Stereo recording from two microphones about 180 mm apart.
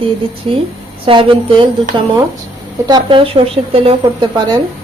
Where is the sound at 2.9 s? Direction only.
25° right (ahead or behind).